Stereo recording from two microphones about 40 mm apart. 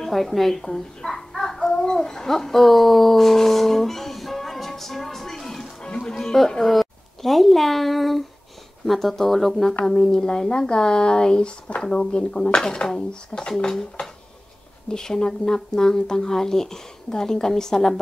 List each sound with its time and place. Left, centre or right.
0.0 s speech: centre
0.7 s a sound: centre
5.8 s music: centre
6.1 s a woman's voice: centre
14.9 s speech: centre